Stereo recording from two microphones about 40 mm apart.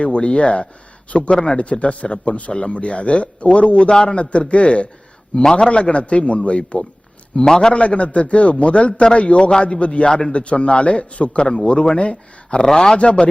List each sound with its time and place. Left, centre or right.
0.0 s a man's voice: left
5.3 s a man's voice: centre
7.3 s a man's voice: centre
7.7 s a man's voice: left
10.1 s a man's voice: centre
10.3 s a man's voice: left
12.6 s a man's voice: centre
13.0 s a man's voice: left